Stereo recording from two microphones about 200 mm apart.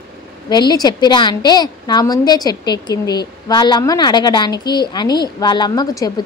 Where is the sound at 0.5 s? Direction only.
20° left (ahead or behind).